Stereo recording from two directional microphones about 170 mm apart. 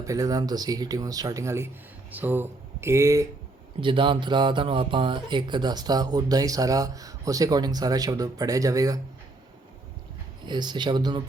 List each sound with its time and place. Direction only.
0.0 s speech: 20° right (ahead or behind)
3.8 s speech: 30° right (ahead or behind)
10.4 s speech: 25° right (ahead or behind)